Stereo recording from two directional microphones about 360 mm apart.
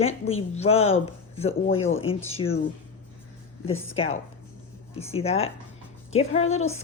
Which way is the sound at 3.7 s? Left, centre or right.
Centre.